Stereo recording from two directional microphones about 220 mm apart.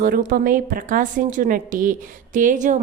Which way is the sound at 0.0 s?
40° right (ahead or behind).